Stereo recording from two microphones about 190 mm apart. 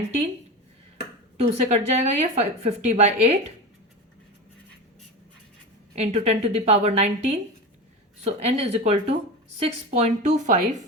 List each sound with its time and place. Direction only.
1.4 s a woman's voice: 35° right (ahead or behind)
6.0 s a woman's voice: 35° right (ahead or behind)